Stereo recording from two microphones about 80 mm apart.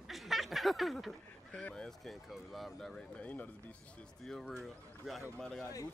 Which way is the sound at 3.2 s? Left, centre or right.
Centre.